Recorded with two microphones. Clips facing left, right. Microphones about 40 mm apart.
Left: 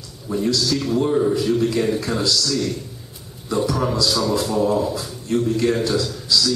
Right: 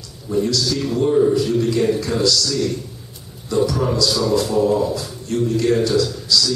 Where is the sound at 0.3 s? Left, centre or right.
Centre.